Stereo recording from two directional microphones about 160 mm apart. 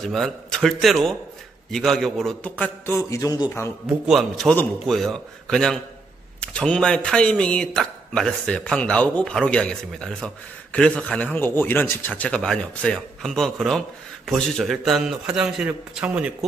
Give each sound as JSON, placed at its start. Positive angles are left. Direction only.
{"t": 0.0, "sound": "speech", "side_deg": 0}
{"t": 3.0, "sound": "a man's voice", "side_deg": 20}
{"t": 4.1, "sound": "speech", "side_deg": 0}